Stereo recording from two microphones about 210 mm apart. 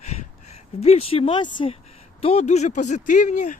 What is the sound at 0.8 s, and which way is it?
Speech, 30° left (ahead or behind).